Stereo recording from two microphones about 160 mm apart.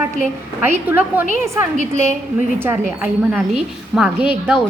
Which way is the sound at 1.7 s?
50° right (ahead or behind).